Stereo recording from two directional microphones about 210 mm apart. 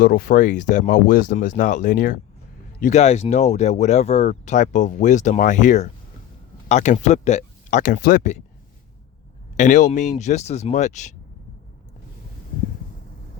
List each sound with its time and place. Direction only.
0.0 s speech: 40° left (ahead or behind)
9.6 s speech: 35° left (ahead or behind)